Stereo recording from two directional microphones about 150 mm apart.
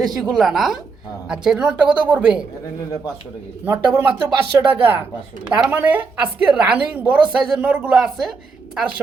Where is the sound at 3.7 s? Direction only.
15° right (ahead or behind).